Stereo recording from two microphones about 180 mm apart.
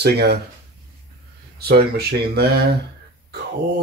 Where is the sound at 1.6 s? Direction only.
60° right (ahead or behind).